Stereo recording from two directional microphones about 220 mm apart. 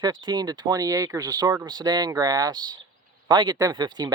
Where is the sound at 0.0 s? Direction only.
20° right (ahead or behind).